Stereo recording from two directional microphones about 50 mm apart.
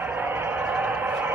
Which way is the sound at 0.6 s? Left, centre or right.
Right.